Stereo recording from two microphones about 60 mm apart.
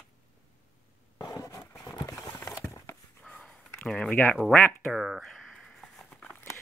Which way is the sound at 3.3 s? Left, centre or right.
Centre.